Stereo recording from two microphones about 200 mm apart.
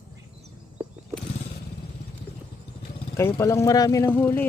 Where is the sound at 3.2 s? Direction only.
15° left (ahead or behind).